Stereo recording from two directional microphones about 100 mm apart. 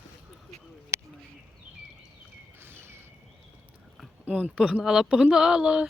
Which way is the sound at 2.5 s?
25° right (ahead or behind).